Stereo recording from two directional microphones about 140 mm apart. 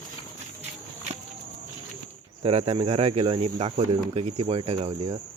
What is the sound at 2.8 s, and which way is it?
Speech, 50° right (ahead or behind).